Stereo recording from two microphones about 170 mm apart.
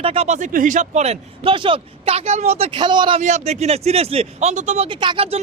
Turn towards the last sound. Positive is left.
turn(degrees=-30)  # may be behind; listen again after turning